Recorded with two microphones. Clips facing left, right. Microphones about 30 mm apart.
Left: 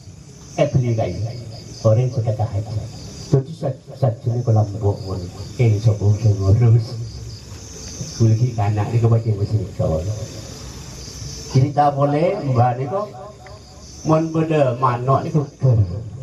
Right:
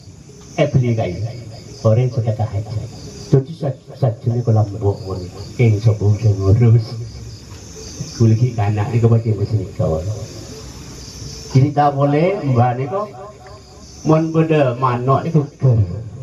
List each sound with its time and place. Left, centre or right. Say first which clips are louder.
0.6 s a man's voice: right 2 dB; centre
6.2 s a man's voice: right 4 dB; centre
6.5 s a man's voice: right 4 dB; centre
8.0 s a man's voice: right 3 dB; centre
14.0 s a man's voice: right 3 dB; centre